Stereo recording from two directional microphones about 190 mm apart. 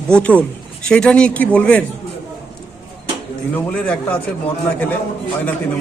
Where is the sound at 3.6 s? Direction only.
10° left (ahead or behind).